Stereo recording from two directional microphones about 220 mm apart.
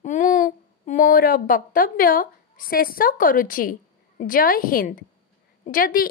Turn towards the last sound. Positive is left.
turn(degrees=40)  # may be behind; listen again after turning